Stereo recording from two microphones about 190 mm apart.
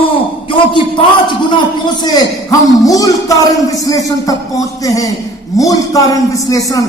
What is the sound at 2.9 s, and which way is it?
A man's voice, 20° left (ahead or behind).